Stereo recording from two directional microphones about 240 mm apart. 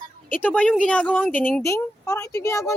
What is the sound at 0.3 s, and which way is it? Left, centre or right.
A woman's voice, centre.